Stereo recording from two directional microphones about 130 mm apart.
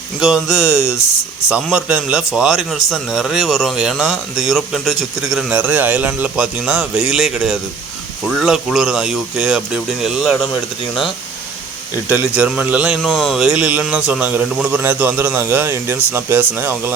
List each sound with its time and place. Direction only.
0.2 s speech: 5° right (ahead or behind)
12.0 s a man's voice: 15° right (ahead or behind)
14.8 s a man's voice: 15° right (ahead or behind)